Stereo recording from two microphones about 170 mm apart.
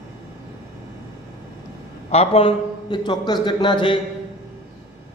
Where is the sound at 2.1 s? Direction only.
35° left (ahead or behind).